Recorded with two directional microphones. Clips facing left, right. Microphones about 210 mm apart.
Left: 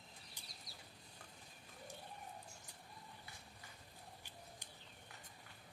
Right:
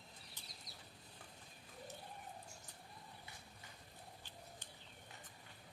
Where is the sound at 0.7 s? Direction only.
20° right (ahead or behind).